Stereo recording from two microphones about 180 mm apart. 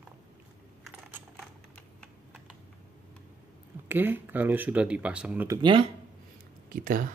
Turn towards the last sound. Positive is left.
turn(degrees=-50)  # may be behind; listen again after turning